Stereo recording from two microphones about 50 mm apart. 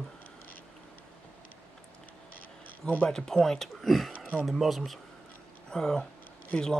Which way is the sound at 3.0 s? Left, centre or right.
Centre.